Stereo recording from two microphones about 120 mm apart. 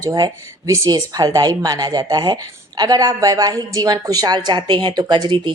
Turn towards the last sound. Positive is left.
turn(degrees=-40)  # may be behind; listen again after turning